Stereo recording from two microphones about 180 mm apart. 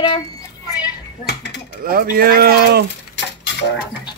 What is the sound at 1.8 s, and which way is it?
Speech, 55° right (ahead or behind).